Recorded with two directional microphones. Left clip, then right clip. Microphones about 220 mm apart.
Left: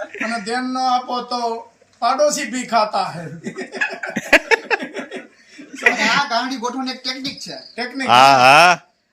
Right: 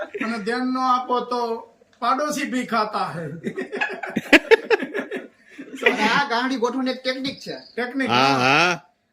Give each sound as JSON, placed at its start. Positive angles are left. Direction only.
{"t": 0.1, "sound": "speech", "side_deg": -10}
{"t": 0.4, "sound": "speech", "side_deg": 10}
{"t": 4.1, "sound": "a sound", "side_deg": -5}
{"t": 5.7, "sound": "chuckle", "side_deg": -10}
{"t": 6.2, "sound": "speech", "side_deg": -25}
{"t": 8.0, "sound": "a sound", "side_deg": -5}